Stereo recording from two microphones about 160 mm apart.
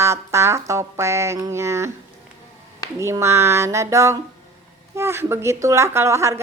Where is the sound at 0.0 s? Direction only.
15° right (ahead or behind).